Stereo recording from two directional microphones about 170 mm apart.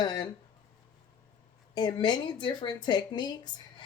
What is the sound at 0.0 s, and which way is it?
Speech, 25° left (ahead or behind).